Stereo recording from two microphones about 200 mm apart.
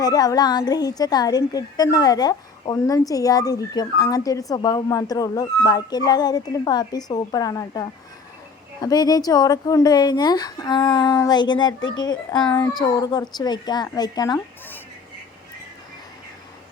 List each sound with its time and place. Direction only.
0.0 s speech: 20° left (ahead or behind)
11.8 s speech: 70° left (ahead or behind)
12.0 s speech: 20° left (ahead or behind)